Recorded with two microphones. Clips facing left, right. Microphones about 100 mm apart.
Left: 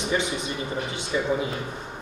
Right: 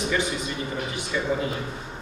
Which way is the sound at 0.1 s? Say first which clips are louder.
Even; 25° left (ahead or behind).